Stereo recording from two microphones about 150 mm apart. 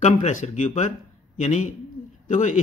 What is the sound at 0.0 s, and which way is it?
A man's voice, 55° left (ahead or behind).